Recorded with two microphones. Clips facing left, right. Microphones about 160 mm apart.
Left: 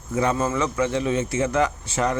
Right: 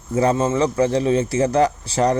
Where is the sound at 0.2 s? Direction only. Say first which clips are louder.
Right 5 dB; 30° right (ahead or behind).